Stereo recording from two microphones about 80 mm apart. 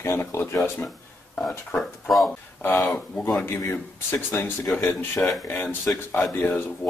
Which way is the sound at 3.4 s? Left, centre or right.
Left.